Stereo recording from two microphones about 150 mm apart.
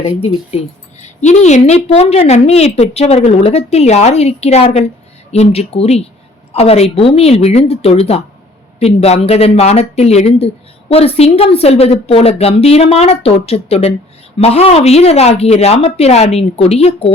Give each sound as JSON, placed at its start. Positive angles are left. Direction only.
{"t": 0.0, "sound": "a woman's voice", "side_deg": 45}